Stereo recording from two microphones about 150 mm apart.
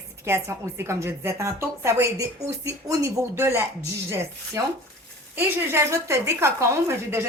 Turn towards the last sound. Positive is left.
turn(degrees=-15)  # may be behind; listen again after turning